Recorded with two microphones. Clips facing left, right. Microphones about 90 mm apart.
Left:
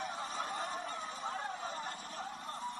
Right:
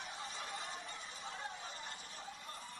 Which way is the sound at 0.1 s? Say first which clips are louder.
Left 6 dB; 40° left (ahead or behind).